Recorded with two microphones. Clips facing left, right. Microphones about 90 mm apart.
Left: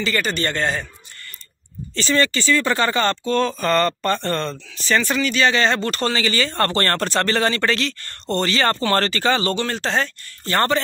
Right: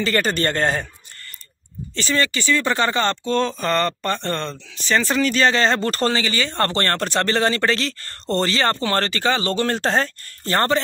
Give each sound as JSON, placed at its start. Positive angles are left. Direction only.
{"t": 0.0, "sound": "speech", "side_deg": -40}
{"t": 2.0, "sound": "speech", "side_deg": -5}
{"t": 5.2, "sound": "speech", "side_deg": -40}
{"t": 6.2, "sound": "speech", "side_deg": -20}
{"t": 9.6, "sound": "speech", "side_deg": -45}
{"t": 10.5, "sound": "speech", "side_deg": -25}